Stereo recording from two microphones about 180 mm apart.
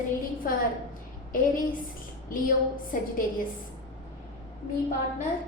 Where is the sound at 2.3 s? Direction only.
50° left (ahead or behind).